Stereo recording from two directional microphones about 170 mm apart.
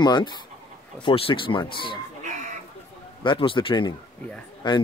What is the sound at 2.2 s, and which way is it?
Chicken, 45° right (ahead or behind).